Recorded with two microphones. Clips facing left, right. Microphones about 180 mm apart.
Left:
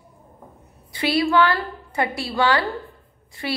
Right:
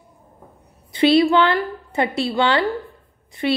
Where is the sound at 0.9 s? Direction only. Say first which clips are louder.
Right 6 dB; 20° right (ahead or behind).